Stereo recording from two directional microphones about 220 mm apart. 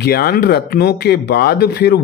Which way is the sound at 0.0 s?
45° left (ahead or behind).